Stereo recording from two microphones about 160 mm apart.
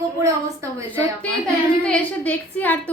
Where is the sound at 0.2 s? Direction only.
20° right (ahead or behind).